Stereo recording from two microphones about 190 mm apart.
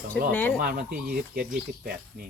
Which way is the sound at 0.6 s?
50° right (ahead or behind).